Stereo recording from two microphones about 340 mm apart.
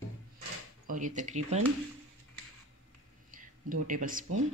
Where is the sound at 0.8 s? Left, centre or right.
Right.